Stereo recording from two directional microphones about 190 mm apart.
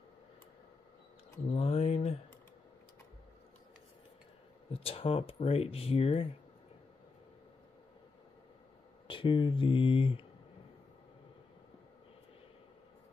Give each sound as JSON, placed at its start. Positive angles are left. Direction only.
{"t": 1.5, "sound": "a sound", "side_deg": 35}
{"t": 4.6, "sound": "speech", "side_deg": 30}
{"t": 9.0, "sound": "speech", "side_deg": 25}